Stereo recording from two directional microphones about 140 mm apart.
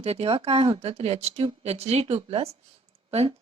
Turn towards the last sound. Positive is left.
turn(degrees=-45)  # may be behind; listen again after turning